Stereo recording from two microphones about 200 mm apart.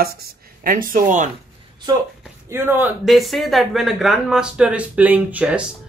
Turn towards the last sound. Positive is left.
turn(degrees=-5)  # may be behind; listen again after turning